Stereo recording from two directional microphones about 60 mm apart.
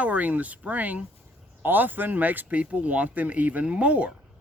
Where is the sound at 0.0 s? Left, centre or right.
Right.